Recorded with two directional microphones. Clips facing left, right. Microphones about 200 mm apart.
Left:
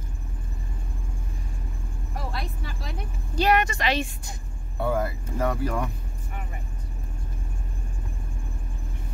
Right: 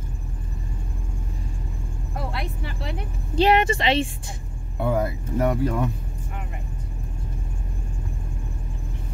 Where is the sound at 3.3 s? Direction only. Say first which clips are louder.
Right 4 dB; 25° right (ahead or behind).